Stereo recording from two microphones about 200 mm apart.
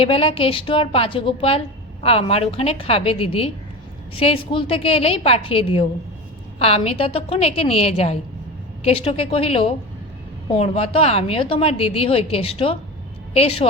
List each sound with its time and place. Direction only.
0.0 s a woman's voice: 30° left (ahead or behind)